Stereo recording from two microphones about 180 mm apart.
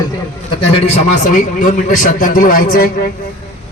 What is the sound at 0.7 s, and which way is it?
A man's voice, 35° left (ahead or behind).